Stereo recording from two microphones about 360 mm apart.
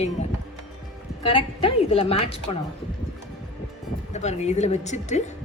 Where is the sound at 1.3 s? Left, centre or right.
Centre.